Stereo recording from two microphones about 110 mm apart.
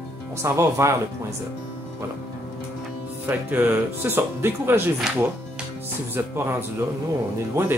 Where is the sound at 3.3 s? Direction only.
15° right (ahead or behind).